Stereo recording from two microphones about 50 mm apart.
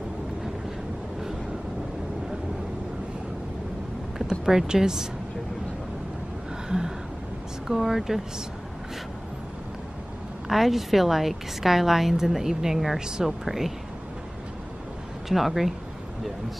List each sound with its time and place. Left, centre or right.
4.3 s speech: centre
7.6 s speech: centre
10.5 s a woman's voice: centre
15.2 s a woman's voice: centre